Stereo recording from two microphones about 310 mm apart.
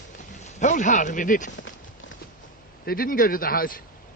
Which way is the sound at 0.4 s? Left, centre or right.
Left.